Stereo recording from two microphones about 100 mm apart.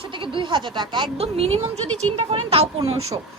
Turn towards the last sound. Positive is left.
turn(degrees=-75)  # may be behind; listen again after turning